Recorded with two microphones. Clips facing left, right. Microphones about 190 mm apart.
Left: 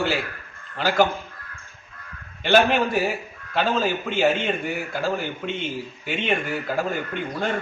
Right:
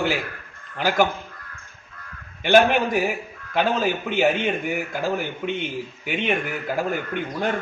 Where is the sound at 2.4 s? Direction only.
15° right (ahead or behind).